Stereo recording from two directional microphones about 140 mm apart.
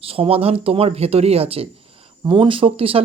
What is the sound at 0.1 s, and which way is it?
Speech, 40° right (ahead or behind).